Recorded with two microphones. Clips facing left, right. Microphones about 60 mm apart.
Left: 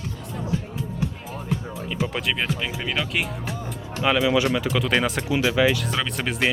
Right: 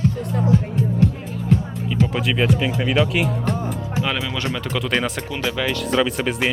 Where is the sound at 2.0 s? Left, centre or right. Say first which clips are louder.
Right 5 dB; centre.